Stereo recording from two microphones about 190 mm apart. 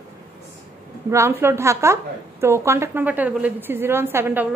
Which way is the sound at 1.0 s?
15° right (ahead or behind).